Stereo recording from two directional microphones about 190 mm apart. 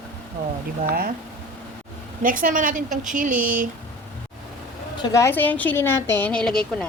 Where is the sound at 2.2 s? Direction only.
45° right (ahead or behind).